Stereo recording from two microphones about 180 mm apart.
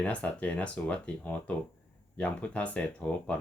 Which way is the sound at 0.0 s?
10° left (ahead or behind).